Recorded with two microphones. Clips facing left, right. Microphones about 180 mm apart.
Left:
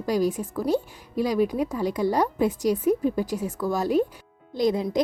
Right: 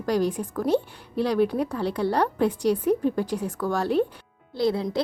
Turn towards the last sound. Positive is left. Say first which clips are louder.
# left 1 dB
turn(degrees=15)  # may be behind; listen again after turning